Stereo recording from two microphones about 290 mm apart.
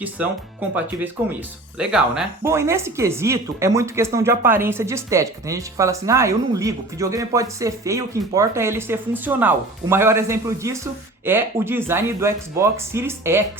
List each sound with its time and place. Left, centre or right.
0.9 s speech: centre